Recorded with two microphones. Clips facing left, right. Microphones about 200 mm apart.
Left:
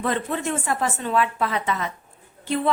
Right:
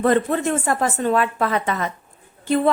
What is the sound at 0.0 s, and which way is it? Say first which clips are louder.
A woman's voice: right 7 dB; 50° right (ahead or behind).